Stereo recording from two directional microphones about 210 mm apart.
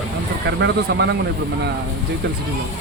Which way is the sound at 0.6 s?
55° right (ahead or behind).